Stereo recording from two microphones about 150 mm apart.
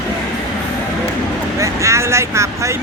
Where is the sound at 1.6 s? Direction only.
20° right (ahead or behind).